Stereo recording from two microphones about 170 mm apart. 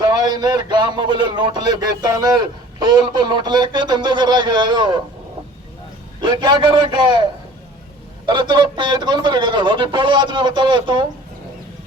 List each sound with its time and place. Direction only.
0.0 s a man's voice: 25° right (ahead or behind)
6.1 s a man's voice: 25° right (ahead or behind)
8.3 s a man's voice: 25° right (ahead or behind)